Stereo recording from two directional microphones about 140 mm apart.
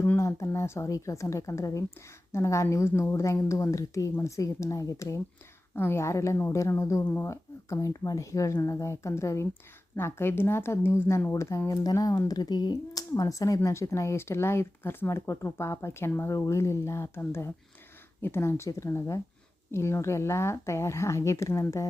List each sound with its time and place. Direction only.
0.0 s a woman's voice: 20° left (ahead or behind)